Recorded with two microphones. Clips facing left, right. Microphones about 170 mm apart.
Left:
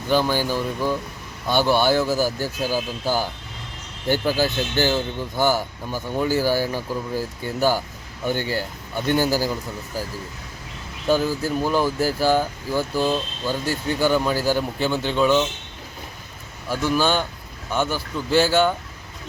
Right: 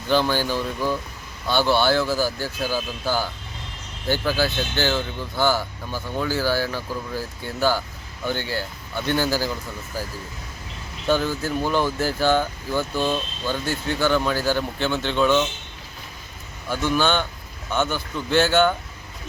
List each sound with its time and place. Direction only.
0.1 s speech: 10° left (ahead or behind)
11.1 s speech: 5° left (ahead or behind)
16.6 s speech: 5° left (ahead or behind)